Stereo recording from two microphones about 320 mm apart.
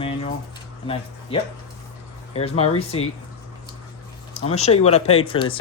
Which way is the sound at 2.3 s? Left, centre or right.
Centre.